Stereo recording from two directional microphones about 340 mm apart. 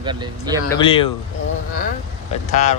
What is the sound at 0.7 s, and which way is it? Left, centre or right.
Speech, centre.